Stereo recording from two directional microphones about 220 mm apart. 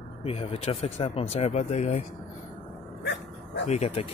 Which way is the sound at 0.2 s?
25° left (ahead or behind).